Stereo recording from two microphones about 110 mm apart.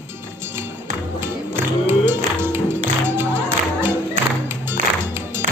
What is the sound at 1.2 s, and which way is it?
Music, 20° right (ahead or behind).